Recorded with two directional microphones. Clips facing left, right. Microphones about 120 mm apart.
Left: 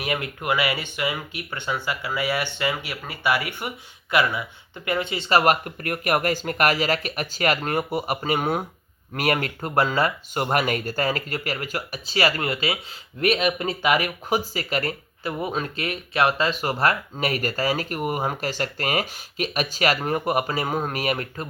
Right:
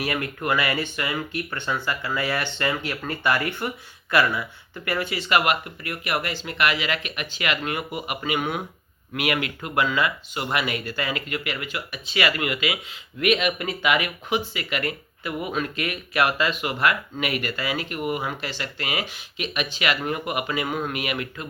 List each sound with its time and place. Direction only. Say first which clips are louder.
0.0 s speech: right 1 dB; 15° left (ahead or behind); by 21.4 s 40° left (ahead or behind)